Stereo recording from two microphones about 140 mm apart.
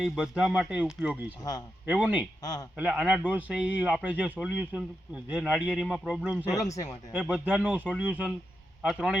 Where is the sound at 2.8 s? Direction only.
10° right (ahead or behind).